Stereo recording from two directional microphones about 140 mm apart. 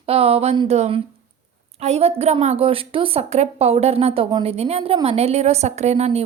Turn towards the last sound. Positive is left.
turn(degrees=-50)  # may be behind; listen again after turning